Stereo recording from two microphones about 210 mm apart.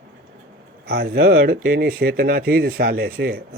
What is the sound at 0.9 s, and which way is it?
Speech, 45° right (ahead or behind).